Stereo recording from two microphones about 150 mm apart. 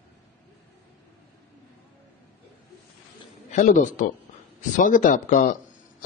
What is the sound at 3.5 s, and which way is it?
Speech, 55° left (ahead or behind).